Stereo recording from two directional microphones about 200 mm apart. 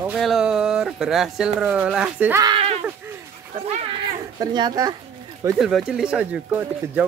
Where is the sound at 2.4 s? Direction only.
25° right (ahead or behind).